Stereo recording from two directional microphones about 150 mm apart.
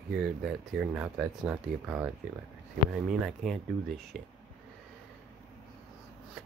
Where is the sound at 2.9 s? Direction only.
Centre (ahead or behind).